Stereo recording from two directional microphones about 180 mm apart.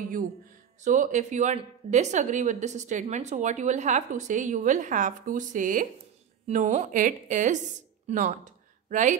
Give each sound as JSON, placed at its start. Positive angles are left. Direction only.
{"t": 0.8, "sound": "a woman's voice", "side_deg": -45}